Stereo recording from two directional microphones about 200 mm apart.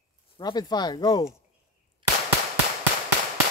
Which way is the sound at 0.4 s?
20° left (ahead or behind).